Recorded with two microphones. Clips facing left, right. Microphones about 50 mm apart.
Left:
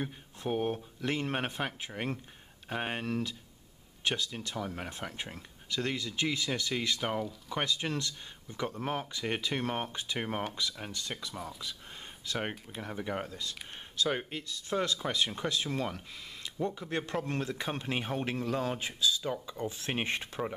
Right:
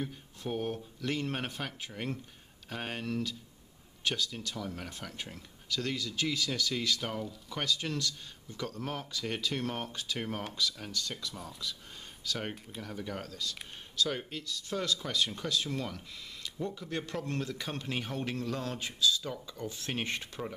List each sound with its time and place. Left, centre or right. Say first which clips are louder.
0.0 s speech: left 2 dB; left